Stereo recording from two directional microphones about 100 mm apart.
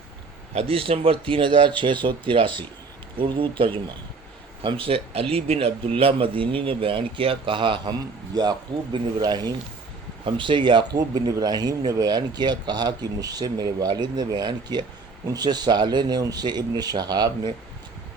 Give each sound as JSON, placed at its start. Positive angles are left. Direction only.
{"t": 0.5, "sound": "a man's voice", "side_deg": -70}
{"t": 8.4, "sound": "speech", "side_deg": -45}
{"t": 10.2, "sound": "speech", "side_deg": -55}